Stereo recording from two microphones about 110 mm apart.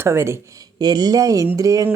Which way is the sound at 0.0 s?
25° right (ahead or behind).